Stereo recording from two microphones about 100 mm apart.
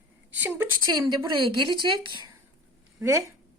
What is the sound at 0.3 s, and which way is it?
Speech, 15° right (ahead or behind).